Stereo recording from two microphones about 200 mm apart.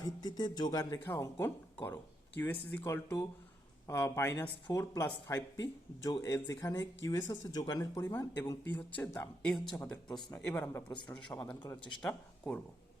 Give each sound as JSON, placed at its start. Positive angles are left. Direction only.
{"t": 0.0, "sound": "speech", "side_deg": 20}